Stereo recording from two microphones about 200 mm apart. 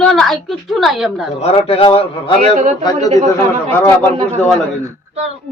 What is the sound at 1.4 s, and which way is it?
Speech, 30° left (ahead or behind).